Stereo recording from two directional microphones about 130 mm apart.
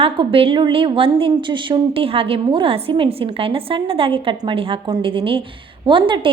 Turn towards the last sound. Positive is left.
turn(degrees=-40)  # may be behind; listen again after turning